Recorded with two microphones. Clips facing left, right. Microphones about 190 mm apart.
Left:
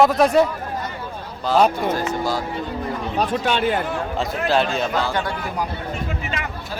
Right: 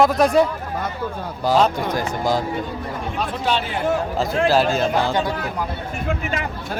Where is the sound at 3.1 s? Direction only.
55° left (ahead or behind).